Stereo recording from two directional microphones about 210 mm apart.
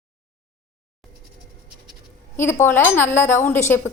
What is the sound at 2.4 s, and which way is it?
A woman's voice, 10° left (ahead or behind).